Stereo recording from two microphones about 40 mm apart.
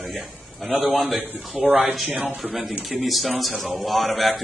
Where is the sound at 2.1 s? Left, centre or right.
Right.